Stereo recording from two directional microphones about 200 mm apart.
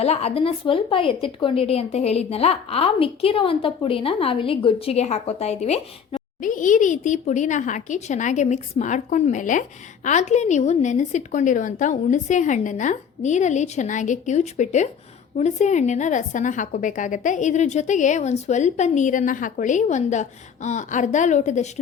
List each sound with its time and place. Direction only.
0.0 s speech: 30° left (ahead or behind)